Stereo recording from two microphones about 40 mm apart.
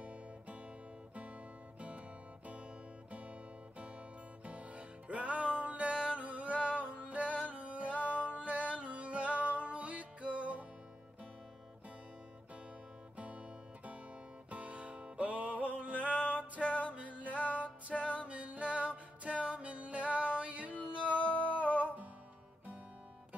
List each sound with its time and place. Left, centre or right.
0.0 s music: right
1.8 s music: right
4.5 s music: right
14.5 s music: right
16.6 s music: left
16.9 s music: right
17.9 s music: left
18.2 s music: right
21.3 s humming: left